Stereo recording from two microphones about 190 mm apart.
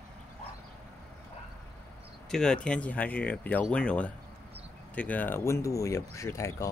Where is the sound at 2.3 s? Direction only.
5° left (ahead or behind).